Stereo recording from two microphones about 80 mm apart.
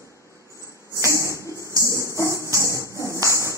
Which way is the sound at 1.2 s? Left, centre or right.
Right.